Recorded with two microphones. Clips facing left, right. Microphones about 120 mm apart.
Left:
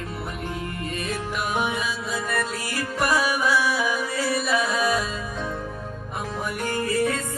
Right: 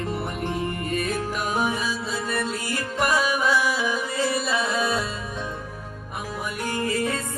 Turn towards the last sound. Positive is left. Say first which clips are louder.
# left 2 dB
turn(degrees=-25)  # may be behind; listen again after turning